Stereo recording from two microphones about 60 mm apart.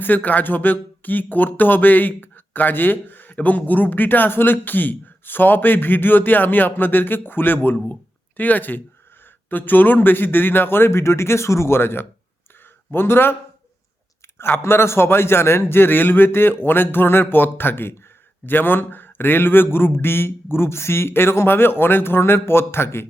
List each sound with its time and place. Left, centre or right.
0.0 s speech: left
14.3 s a man's voice: left